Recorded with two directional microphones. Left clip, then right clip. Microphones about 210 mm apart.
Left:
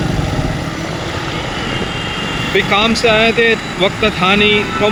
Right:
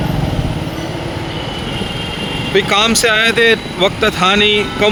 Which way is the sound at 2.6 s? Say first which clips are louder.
Even; 40° right (ahead or behind).